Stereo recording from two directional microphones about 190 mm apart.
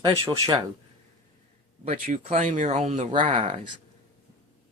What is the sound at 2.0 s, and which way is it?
Speech, 45° right (ahead or behind).